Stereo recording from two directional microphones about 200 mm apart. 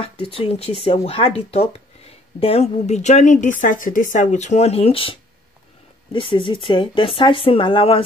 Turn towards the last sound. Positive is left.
turn(degrees=25)  # may be behind; listen again after turning